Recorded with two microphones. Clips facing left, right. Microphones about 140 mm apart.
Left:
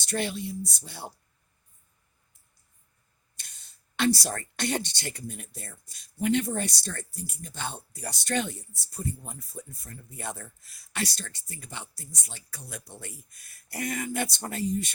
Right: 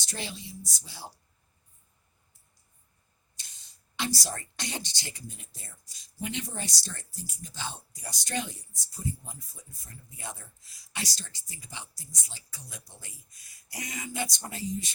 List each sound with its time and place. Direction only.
0.0 s speech: 60° left (ahead or behind)
3.3 s speech: 60° left (ahead or behind)